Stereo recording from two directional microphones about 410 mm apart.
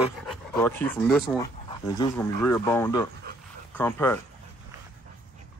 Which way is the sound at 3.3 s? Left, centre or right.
Right.